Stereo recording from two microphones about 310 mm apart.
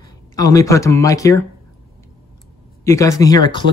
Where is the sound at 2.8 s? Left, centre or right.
Centre.